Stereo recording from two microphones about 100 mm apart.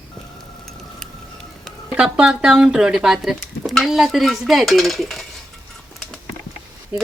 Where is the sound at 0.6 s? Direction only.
5° left (ahead or behind).